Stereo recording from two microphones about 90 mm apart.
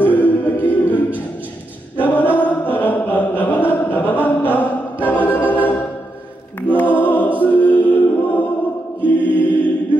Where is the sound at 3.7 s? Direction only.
20° left (ahead or behind).